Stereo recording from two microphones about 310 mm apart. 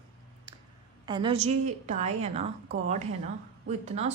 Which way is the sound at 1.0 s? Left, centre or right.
Centre.